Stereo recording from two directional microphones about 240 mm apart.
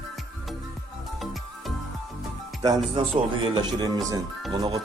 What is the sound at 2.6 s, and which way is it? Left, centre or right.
Speech, centre.